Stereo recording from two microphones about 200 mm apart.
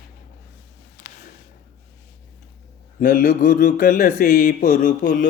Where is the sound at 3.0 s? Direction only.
40° left (ahead or behind).